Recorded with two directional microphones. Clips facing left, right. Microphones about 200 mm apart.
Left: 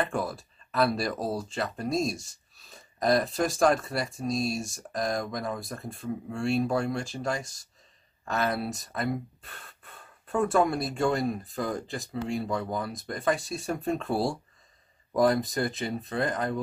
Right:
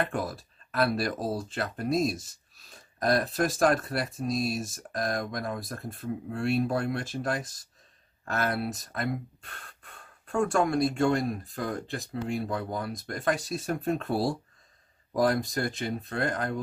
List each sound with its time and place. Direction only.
0.1 s speech: centre (ahead or behind)